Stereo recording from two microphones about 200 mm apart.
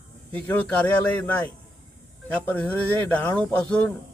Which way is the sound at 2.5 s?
10° left (ahead or behind).